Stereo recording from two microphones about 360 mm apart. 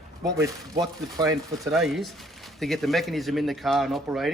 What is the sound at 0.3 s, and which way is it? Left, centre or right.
Speech, centre.